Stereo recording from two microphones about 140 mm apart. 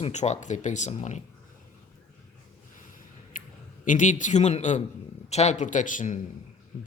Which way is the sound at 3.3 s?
75° left (ahead or behind).